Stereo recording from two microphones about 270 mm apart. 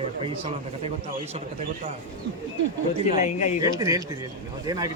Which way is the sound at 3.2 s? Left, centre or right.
Left.